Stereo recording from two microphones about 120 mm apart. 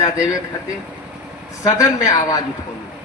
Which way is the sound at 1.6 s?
30° left (ahead or behind).